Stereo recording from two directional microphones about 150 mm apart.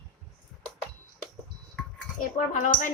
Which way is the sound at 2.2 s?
55° left (ahead or behind).